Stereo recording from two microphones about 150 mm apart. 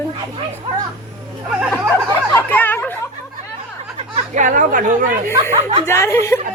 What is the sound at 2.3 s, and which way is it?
Chatter, 15° left (ahead or behind).